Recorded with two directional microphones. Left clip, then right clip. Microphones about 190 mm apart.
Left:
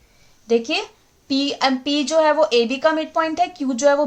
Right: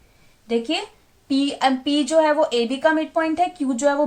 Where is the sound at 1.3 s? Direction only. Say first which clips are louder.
Even; 35° left (ahead or behind).